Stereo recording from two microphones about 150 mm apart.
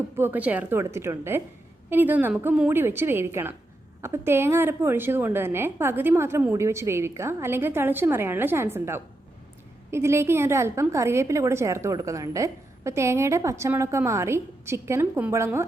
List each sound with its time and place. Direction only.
0.2 s a woman's voice: 10° right (ahead or behind)